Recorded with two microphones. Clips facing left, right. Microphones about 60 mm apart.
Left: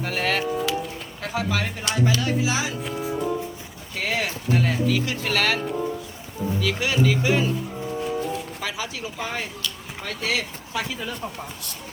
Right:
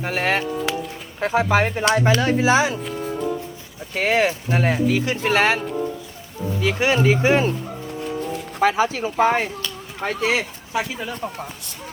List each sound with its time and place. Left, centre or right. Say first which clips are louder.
0.0 s speech: right 3 dB; right
2.8 s music: right 1 dB; centre
3.9 s speech: right 7 dB; right
8.3 s speech: right 9 dB; right